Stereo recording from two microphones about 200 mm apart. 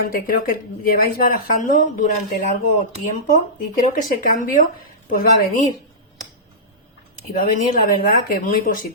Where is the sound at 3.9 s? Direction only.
45° left (ahead or behind).